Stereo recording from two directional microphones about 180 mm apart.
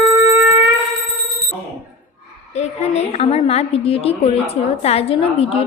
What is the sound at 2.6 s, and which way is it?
A woman's voice, 35° left (ahead or behind).